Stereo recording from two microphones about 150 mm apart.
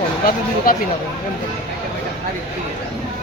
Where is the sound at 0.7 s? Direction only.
70° left (ahead or behind).